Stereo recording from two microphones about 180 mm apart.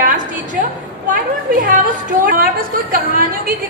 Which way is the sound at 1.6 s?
50° right (ahead or behind).